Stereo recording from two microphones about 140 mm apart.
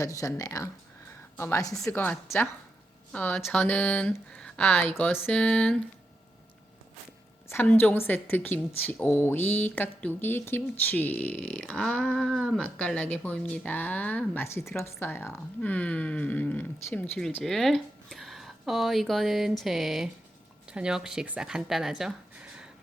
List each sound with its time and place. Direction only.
0.0 s a woman's voice: 25° left (ahead or behind); by 5.8 s 5° left (ahead or behind)
7.4 s a woman's voice: 15° left (ahead or behind); by 22.7 s 5° right (ahead or behind)